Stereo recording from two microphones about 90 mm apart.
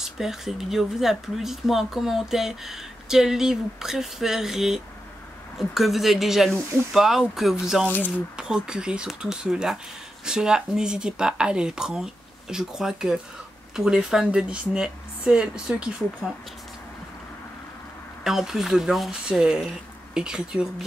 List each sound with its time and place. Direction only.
0.0 s speech: 5° right (ahead or behind)
18.2 s speech: 5° right (ahead or behind)